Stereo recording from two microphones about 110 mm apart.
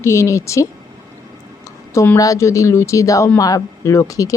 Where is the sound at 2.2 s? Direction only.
30° left (ahead or behind).